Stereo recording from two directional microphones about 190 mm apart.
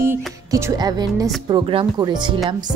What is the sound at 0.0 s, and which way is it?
Speech, 15° right (ahead or behind).